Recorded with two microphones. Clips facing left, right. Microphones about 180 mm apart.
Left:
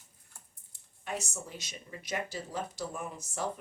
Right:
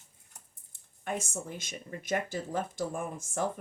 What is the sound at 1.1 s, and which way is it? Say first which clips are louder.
Speech: right 3 dB; 50° right (ahead or behind).